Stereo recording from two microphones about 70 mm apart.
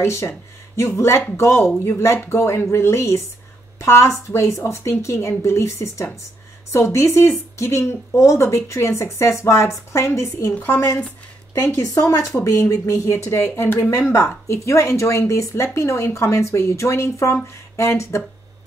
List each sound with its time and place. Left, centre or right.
0.0 s a woman's voice: left
10.5 s a woman's voice: centre
11.5 s a woman's voice: left
11.8 s a woman's voice: left
14.5 s a woman's voice: left